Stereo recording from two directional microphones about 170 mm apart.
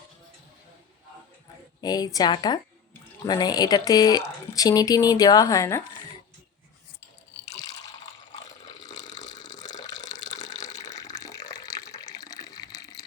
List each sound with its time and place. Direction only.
1.8 s speech: 20° left (ahead or behind)
8.7 s water: 25° left (ahead or behind)